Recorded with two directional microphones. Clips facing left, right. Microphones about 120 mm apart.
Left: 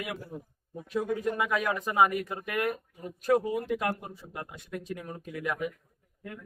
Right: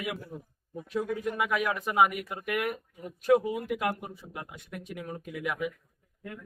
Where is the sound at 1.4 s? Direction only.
10° right (ahead or behind).